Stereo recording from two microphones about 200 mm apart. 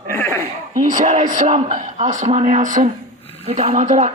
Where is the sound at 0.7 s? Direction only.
40° right (ahead or behind).